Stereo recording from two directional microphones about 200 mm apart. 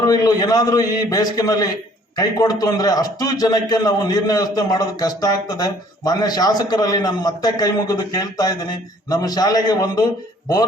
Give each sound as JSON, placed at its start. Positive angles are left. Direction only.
{"t": 0.0, "sound": "a man's voice", "side_deg": 20}